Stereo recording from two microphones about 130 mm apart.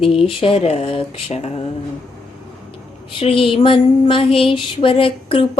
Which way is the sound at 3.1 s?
45° left (ahead or behind).